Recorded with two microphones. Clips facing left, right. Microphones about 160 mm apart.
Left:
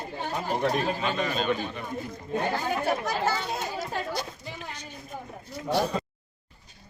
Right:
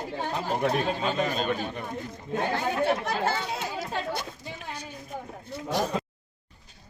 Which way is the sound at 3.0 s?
60° right (ahead or behind).